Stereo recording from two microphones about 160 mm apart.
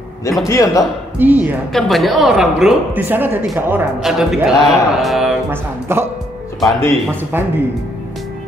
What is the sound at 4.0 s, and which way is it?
Speech, centre (ahead or behind).